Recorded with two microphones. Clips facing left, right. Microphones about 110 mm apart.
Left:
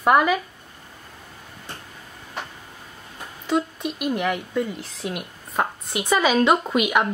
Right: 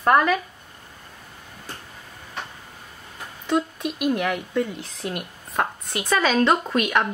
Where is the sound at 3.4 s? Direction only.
Centre (ahead or behind).